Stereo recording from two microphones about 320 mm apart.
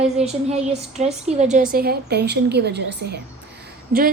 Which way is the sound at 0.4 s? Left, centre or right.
Centre.